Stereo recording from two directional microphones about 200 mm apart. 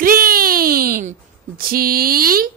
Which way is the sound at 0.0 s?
45° right (ahead or behind).